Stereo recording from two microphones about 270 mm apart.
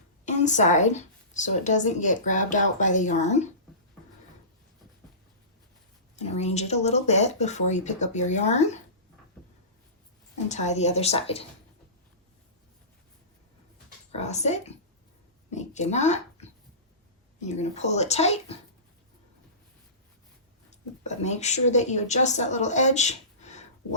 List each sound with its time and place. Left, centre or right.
0.3 s a woman's voice: left
6.1 s a woman's voice: left
10.5 s a woman's voice: left
14.1 s a woman's voice: left
20.7 s speech: left